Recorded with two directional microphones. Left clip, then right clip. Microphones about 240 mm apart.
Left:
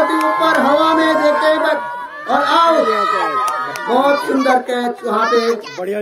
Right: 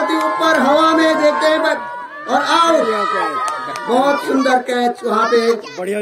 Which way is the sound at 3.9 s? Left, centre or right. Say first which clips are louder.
Left 1 dB; right.